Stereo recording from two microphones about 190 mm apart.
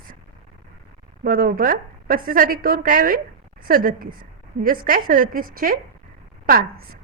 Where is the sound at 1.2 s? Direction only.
50° right (ahead or behind).